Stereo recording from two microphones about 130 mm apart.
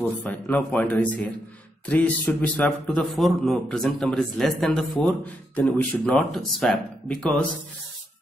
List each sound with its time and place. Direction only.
0.0 s a man's voice: 10° left (ahead or behind)